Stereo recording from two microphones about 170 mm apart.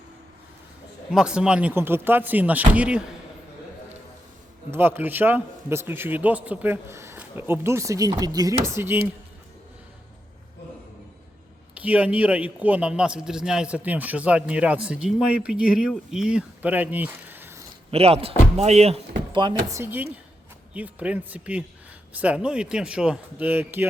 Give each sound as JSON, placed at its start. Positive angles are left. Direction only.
{"t": 1.1, "sound": "a man's voice", "side_deg": -5}
{"t": 4.7, "sound": "a man's voice", "side_deg": -10}
{"t": 11.8, "sound": "a man's voice", "side_deg": -10}
{"t": 17.9, "sound": "speech", "side_deg": -35}
{"t": 19.7, "sound": "a man's voice", "side_deg": -15}